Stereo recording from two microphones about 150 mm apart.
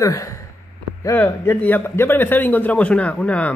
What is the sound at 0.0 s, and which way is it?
Speech, 20° left (ahead or behind).